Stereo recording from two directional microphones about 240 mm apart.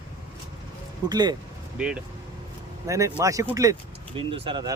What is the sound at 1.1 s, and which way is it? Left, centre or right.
Speech, centre.